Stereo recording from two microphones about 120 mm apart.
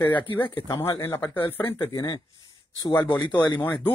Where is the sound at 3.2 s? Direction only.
35° left (ahead or behind).